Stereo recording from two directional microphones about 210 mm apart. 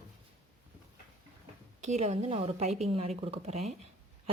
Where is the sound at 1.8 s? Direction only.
35° right (ahead or behind).